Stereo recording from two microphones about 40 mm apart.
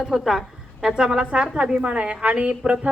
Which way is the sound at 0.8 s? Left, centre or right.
Centre.